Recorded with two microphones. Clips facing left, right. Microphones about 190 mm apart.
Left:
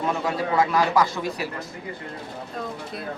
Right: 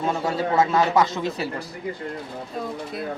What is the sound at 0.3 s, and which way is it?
Speech, 25° right (ahead or behind).